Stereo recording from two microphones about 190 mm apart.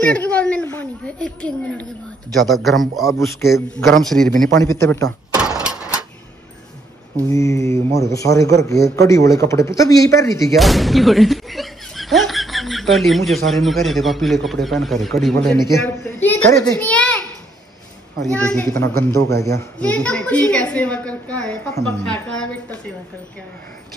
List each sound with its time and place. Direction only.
0.0 s a man's voice: 5° left (ahead or behind)
4.6 s a man's voice: 15° left (ahead or behind)
5.6 s a sound: 5° right (ahead or behind)
7.2 s a man's voice: 15° left (ahead or behind)
10.5 s a man's voice: centre (ahead or behind)
16.7 s a sound: 5° left (ahead or behind)
18.2 s a man's voice: 5° left (ahead or behind)